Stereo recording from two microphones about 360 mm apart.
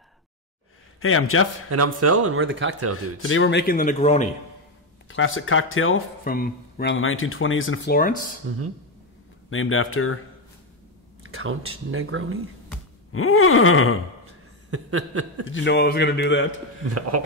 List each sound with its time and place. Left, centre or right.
1.0 s speech: left
1.7 s speech: right
3.2 s speech: left; by 4.3 s centre
5.0 s speech: left
8.5 s speech: right
9.5 s speech: left
11.3 s speech: right
13.1 s speech: left
14.7 s speech: right
15.5 s speech: left
17.1 s speech: right